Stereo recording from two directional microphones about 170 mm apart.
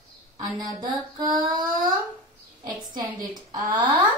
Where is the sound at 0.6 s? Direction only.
25° right (ahead or behind).